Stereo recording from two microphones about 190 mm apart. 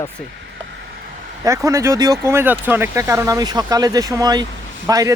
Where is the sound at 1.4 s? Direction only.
15° right (ahead or behind).